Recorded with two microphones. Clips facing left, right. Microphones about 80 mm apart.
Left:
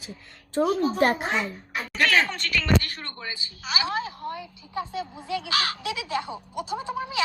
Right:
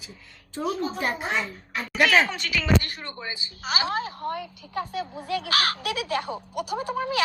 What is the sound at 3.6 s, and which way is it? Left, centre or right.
Speech, right.